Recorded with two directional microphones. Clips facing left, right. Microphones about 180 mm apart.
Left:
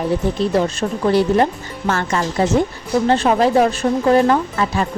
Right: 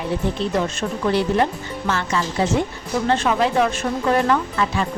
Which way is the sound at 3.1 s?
35° left (ahead or behind).